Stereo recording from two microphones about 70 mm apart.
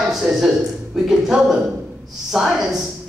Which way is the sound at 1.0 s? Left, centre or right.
Centre.